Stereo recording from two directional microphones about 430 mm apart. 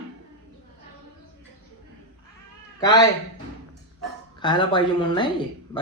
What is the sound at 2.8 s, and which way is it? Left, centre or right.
Speech, centre.